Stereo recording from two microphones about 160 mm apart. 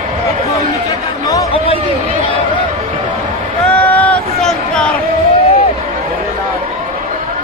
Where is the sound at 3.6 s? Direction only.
10° left (ahead or behind).